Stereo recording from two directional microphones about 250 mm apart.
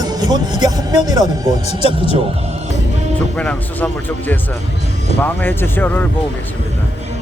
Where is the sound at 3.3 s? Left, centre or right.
Centre.